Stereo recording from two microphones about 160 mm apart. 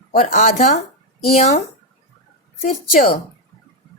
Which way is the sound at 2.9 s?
65° left (ahead or behind).